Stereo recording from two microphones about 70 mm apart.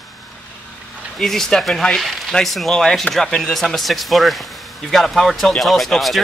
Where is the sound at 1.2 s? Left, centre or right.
Centre.